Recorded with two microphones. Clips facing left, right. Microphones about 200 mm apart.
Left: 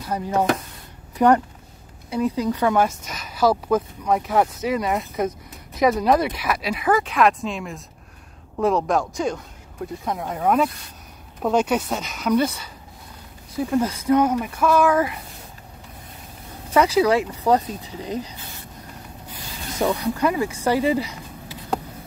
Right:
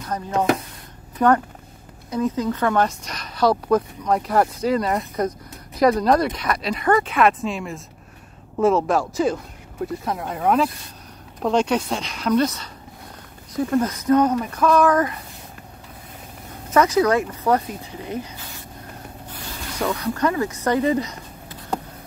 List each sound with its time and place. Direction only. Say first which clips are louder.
0.0 s speech: even; 10° left (ahead or behind)
16.7 s speech: even; 10° left (ahead or behind)
19.2 s speech: even; 15° left (ahead or behind)